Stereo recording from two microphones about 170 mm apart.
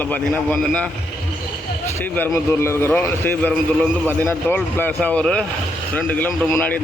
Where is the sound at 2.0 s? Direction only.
15° left (ahead or behind).